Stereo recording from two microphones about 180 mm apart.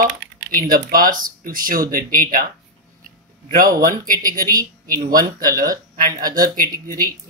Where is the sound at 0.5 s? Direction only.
50° right (ahead or behind).